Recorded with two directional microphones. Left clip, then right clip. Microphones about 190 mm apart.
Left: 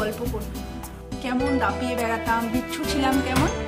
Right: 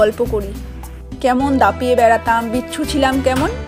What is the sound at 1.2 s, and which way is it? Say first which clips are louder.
A woman's voice: right 10 dB; 20° right (ahead or behind).